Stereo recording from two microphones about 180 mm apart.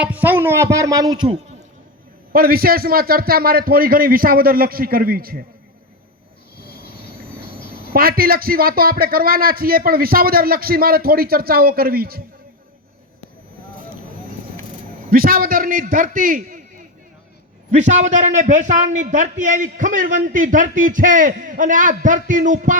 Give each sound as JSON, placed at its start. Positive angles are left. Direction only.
{"t": 0.0, "sound": "speech", "side_deg": -10}
{"t": 2.3, "sound": "speech", "side_deg": -55}
{"t": 7.7, "sound": "speech", "side_deg": -55}
{"t": 15.1, "sound": "a man's voice", "side_deg": -55}
{"t": 17.7, "sound": "a man's voice", "side_deg": -40}